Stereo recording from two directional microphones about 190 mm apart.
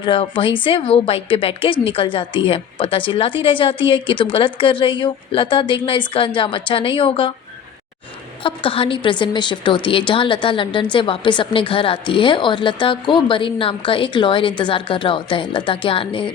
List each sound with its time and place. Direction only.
0.0 s speech: 25° left (ahead or behind)
8.4 s speech: 30° left (ahead or behind)